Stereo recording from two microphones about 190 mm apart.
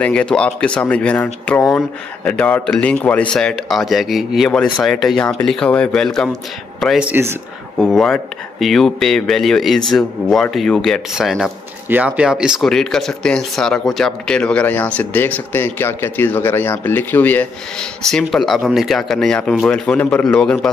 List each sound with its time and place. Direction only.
0.0 s speech: 5° left (ahead or behind); by 7.3 s 10° right (ahead or behind)
7.8 s speech: centre (ahead or behind)